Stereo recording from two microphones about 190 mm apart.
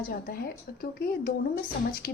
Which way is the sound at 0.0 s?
50° left (ahead or behind).